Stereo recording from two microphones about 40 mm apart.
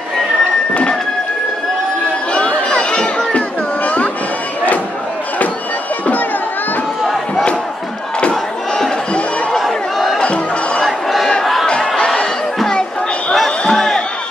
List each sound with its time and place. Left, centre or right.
2.3 s crowd: left
3.3 s music: left
9.6 s crowd: centre
10.2 s music: left
10.8 s crowd: centre
13.3 s music: centre